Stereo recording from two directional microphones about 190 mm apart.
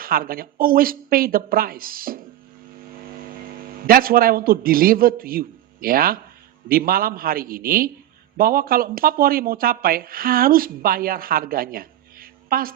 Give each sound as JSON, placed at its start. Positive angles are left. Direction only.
{"t": 0.0, "sound": "speech", "side_deg": -50}
{"t": 3.8, "sound": "speech", "side_deg": -50}